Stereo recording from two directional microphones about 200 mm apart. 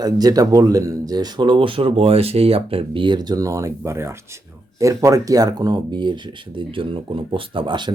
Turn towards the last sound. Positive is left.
turn(degrees=-25)  # may be behind; listen again after turning